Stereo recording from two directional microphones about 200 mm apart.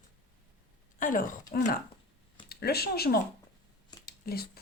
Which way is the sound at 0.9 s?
40° left (ahead or behind).